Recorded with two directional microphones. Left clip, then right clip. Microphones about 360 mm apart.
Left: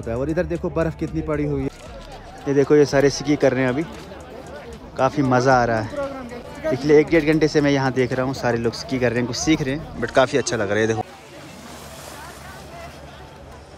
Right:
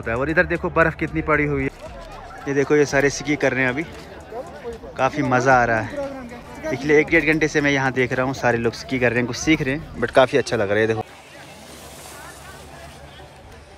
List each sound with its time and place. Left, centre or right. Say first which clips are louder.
0.0 s speech: right 4 dB; centre
0.9 s speech: right 2 dB; left
1.2 s speech: right 5 dB; centre
4.9 s speech: left 1 dB; centre